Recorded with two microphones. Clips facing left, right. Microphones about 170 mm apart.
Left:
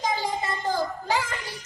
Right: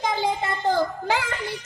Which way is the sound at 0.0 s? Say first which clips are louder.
Right 3 dB; 60° right (ahead or behind).